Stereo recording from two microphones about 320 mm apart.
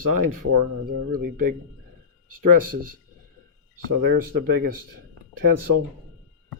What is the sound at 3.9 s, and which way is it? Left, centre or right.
Speech, right.